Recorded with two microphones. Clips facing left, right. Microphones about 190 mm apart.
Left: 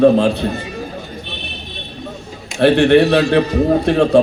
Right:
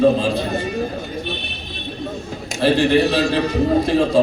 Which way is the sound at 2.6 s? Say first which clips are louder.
Left 5 dB; 65° left (ahead or behind).